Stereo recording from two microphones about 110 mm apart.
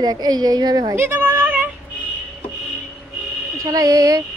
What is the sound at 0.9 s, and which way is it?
Speech, 20° right (ahead or behind).